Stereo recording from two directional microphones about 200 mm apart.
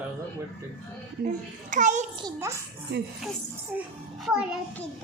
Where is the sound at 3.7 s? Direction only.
5° right (ahead or behind).